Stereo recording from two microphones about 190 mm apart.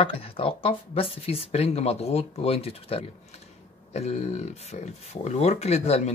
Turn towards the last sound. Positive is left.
turn(degrees=35)  # may be behind; listen again after turning